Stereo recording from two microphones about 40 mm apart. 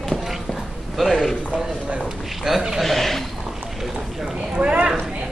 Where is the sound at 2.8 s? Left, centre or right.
Centre.